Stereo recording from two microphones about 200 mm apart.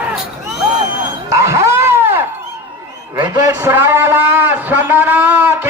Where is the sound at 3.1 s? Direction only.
20° right (ahead or behind).